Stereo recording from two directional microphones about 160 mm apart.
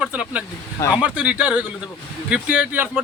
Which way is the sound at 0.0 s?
5° right (ahead or behind).